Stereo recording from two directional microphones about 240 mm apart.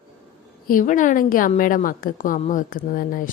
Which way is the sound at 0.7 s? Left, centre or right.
Left.